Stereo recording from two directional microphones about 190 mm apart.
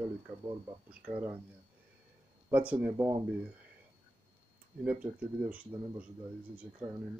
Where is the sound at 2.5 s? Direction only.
10° right (ahead or behind).